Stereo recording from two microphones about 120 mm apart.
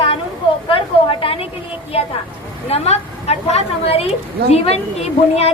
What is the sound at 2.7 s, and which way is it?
A woman's voice, 60° left (ahead or behind).